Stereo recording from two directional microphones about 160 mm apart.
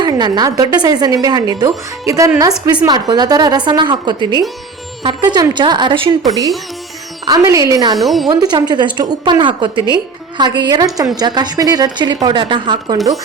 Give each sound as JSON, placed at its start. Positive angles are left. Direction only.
{"t": 0.0, "sound": "a woman's voice", "side_deg": -25}
{"t": 7.9, "sound": "speech", "side_deg": 0}
{"t": 8.3, "sound": "a woman's voice", "side_deg": -25}